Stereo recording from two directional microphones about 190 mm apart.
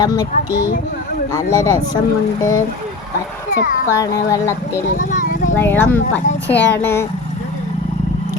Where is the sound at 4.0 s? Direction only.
20° left (ahead or behind).